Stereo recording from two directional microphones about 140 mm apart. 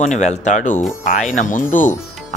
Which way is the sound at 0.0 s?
60° left (ahead or behind).